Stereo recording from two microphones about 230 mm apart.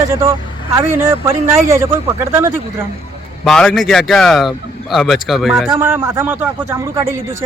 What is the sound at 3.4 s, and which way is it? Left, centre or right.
Speech, centre.